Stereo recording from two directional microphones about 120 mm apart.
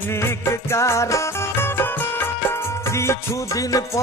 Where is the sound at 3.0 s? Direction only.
25° left (ahead or behind).